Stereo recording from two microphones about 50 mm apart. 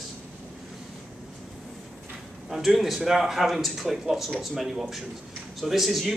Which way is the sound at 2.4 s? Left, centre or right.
Centre.